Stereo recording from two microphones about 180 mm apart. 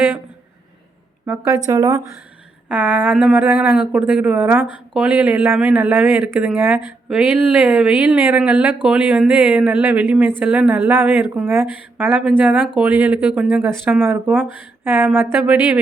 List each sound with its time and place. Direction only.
1.5 s speech: 20° right (ahead or behind)